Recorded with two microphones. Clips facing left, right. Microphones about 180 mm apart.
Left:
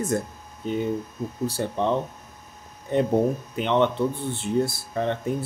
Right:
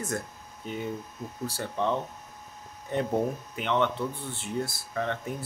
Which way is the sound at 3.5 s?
25° left (ahead or behind).